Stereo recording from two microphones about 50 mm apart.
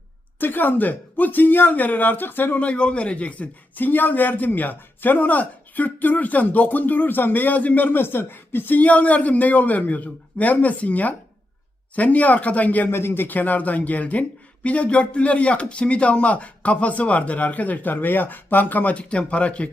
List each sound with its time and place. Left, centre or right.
0.3 s a man's voice: left
2.6 s a man's voice: left
8.8 s a man's voice: left
12.9 s speech: left
13.2 s a man's voice: left